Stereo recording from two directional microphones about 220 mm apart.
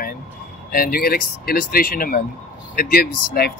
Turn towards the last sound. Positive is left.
turn(degrees=45)  # may be behind; listen again after turning